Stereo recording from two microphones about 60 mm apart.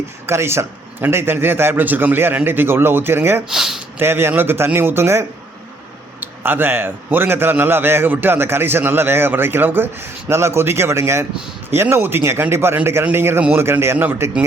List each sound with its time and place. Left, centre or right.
0.3 s a man's voice: right
3.5 s speech: centre
3.9 s a man's voice: right
6.1 s a man's voice: right